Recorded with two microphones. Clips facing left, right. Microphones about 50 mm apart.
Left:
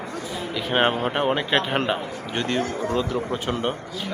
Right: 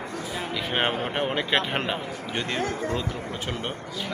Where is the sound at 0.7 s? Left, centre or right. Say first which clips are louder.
Left 6 dB; centre.